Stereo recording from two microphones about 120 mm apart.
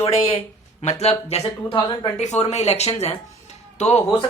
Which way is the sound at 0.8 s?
65° left (ahead or behind).